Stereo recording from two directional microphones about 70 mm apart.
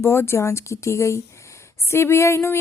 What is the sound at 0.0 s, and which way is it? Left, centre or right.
A woman's voice, left.